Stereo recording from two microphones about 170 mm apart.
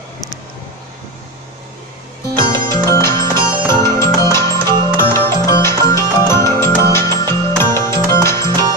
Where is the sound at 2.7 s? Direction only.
15° left (ahead or behind).